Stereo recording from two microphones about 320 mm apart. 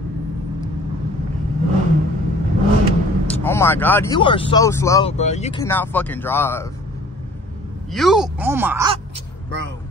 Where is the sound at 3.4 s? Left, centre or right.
Centre.